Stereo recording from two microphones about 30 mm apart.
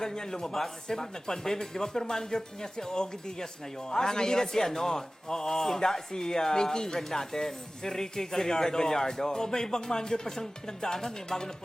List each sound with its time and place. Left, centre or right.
0.0 s speech: left